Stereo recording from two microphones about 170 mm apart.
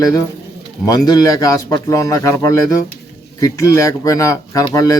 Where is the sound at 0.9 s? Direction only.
20° left (ahead or behind).